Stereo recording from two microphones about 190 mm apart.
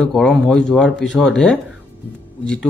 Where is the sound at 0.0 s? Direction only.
5° left (ahead or behind).